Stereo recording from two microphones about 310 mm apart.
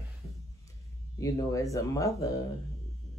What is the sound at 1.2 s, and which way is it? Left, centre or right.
Speech, centre.